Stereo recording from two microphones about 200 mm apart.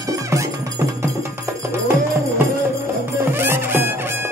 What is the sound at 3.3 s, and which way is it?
Music, 10° right (ahead or behind).